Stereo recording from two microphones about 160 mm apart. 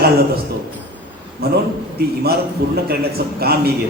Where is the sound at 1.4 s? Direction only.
75° right (ahead or behind).